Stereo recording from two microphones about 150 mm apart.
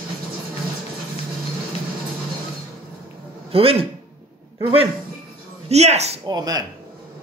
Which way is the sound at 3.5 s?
40° right (ahead or behind).